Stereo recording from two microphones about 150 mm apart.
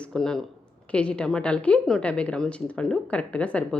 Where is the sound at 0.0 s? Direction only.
5° left (ahead or behind).